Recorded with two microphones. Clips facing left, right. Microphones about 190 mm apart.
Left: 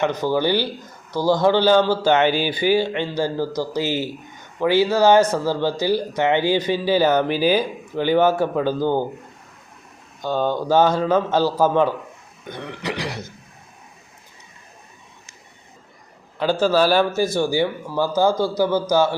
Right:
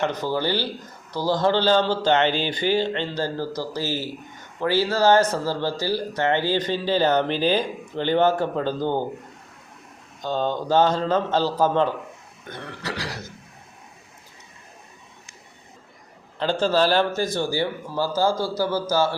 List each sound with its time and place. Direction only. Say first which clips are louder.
0.0 s speech: left 4 dB; 15° left (ahead or behind)
10.2 s speech: left 3 dB; 10° left (ahead or behind)
12.5 s throat clearing: left 4 dB; 15° left (ahead or behind)
16.4 s speech: left 3 dB; 10° left (ahead or behind)